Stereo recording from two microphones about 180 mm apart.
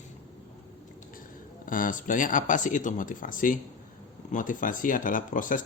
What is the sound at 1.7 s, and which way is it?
Speech, 50° left (ahead or behind).